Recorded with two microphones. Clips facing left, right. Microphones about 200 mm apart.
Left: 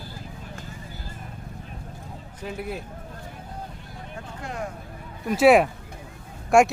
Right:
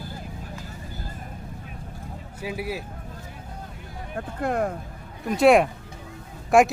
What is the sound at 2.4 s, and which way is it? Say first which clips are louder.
Speech: right 2 dB; 5° right (ahead or behind).